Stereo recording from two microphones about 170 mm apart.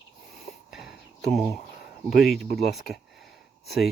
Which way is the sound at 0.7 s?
Centre (ahead or behind).